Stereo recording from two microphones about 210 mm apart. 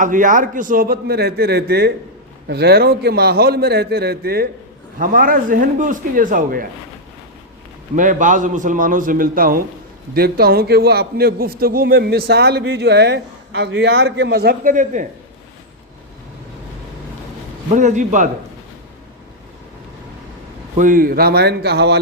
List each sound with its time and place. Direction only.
0.0 s a man's voice: 40° right (ahead or behind)
7.9 s a man's voice: 35° right (ahead or behind)
17.7 s a man's voice: 35° right (ahead or behind)
20.7 s a man's voice: 40° right (ahead or behind)